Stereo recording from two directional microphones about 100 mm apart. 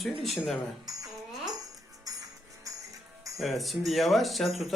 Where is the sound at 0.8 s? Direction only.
40° right (ahead or behind).